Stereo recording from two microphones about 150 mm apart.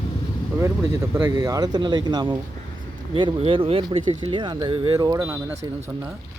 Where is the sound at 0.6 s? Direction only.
15° right (ahead or behind).